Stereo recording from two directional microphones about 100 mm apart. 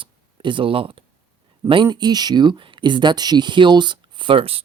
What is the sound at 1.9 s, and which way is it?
Speech, 45° right (ahead or behind).